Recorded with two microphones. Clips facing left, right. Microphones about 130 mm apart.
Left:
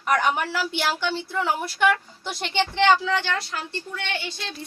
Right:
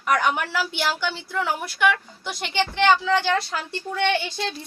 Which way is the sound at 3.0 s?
Centre (ahead or behind).